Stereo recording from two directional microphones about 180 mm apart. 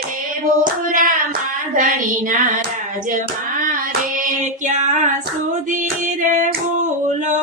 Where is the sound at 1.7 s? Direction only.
45° right (ahead or behind).